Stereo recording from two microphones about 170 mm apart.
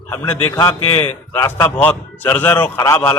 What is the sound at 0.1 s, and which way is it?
A man's voice, 10° left (ahead or behind).